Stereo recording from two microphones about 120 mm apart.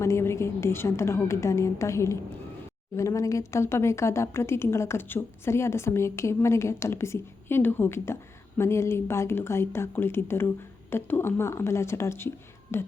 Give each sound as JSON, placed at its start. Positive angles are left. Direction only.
{"t": 0.0, "sound": "speech", "side_deg": 25}